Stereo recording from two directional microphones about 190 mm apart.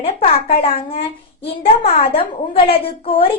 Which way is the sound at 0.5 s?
30° left (ahead or behind).